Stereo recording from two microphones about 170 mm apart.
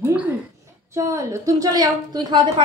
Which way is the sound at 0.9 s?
20° right (ahead or behind).